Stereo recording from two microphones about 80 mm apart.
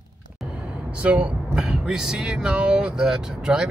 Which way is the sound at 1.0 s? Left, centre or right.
Centre.